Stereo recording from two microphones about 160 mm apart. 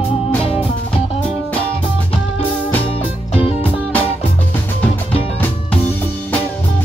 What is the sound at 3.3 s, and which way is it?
Music, 35° left (ahead or behind).